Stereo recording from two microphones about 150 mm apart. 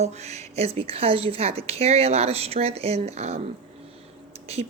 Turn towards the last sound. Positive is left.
turn(degrees=-45)  # may be behind; listen again after turning